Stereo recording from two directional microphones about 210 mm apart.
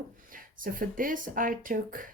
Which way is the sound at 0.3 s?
40° right (ahead or behind).